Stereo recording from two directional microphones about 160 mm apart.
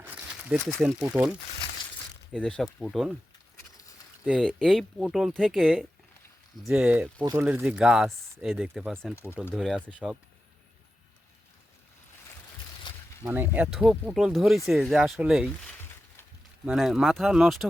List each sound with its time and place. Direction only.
0.0 s a sound: 10° right (ahead or behind)
0.6 s speech: 5° left (ahead or behind)
1.0 s speech: 5° right (ahead or behind)
2.3 s speech: 5° left (ahead or behind)
4.2 s speech: 5° right (ahead or behind)
13.2 s speech: 15° right (ahead or behind)
15.8 s a sound: 15° left (ahead or behind)
16.6 s speech: centre (ahead or behind)